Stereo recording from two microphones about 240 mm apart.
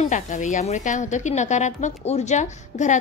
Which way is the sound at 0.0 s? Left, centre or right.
Left.